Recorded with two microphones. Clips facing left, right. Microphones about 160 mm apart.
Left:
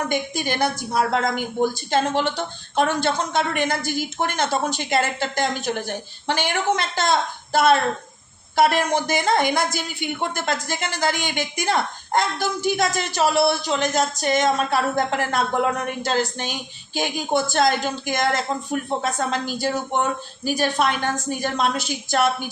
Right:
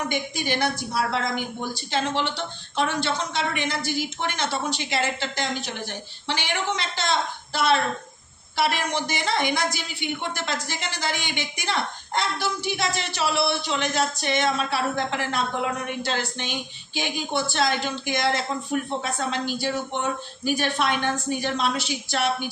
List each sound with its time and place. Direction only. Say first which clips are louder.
0.1 s a woman's voice: left 3 dB; 50° left (ahead or behind)